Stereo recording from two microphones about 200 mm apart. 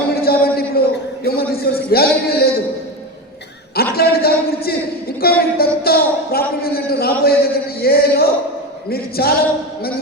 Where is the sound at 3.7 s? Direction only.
50° left (ahead or behind).